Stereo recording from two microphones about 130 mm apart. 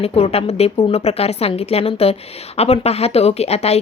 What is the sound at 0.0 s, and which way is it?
A woman's voice, 50° left (ahead or behind).